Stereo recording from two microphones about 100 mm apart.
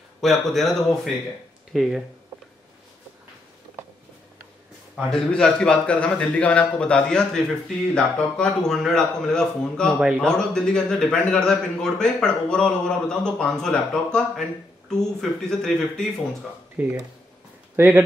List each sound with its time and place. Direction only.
0.2 s speech: centre (ahead or behind)
5.1 s a man's voice: 10° left (ahead or behind)
16.8 s speech: 15° right (ahead or behind)